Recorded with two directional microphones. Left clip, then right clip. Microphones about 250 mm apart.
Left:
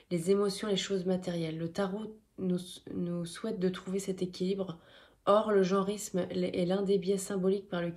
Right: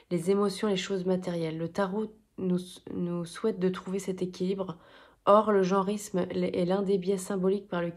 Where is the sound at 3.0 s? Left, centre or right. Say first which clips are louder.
Right 8 dB; right.